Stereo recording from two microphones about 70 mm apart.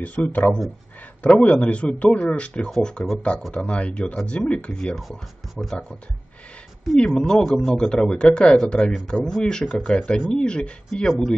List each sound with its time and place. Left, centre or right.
0.0 s a man's voice: left
5.6 s speech: centre
7.2 s speech: centre